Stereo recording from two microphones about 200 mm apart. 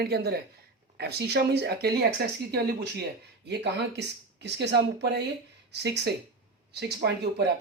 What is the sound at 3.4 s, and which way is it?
Speech, 55° right (ahead or behind).